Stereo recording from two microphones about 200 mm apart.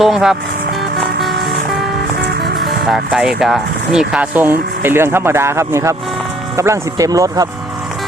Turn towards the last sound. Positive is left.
turn(degrees=-20)  # may be behind; listen again after turning